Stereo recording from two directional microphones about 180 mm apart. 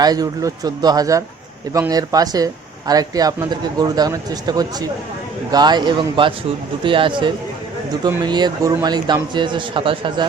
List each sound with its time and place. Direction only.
0.0 s speech: 20° right (ahead or behind)